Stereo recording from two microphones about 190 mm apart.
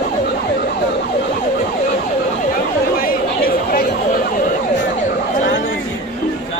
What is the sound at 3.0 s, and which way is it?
Emergency vehicle, 50° left (ahead or behind).